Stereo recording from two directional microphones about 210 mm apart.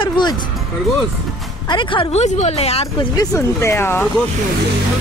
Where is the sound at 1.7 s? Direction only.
25° left (ahead or behind).